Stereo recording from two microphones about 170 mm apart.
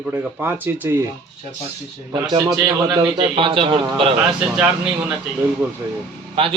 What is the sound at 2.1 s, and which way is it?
A man's voice, 25° right (ahead or behind).